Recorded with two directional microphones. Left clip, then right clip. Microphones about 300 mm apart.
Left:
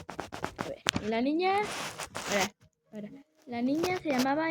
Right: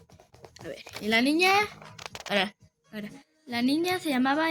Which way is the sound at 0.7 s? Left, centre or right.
Left.